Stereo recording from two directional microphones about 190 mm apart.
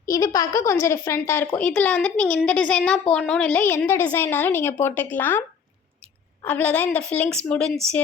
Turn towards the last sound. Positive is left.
turn(degrees=5)  # may be behind; listen again after turning